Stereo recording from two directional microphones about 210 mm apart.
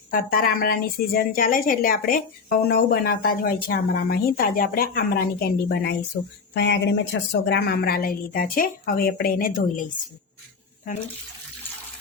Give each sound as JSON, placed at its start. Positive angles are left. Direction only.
{"t": 0.1, "sound": "a woman's voice", "side_deg": 40}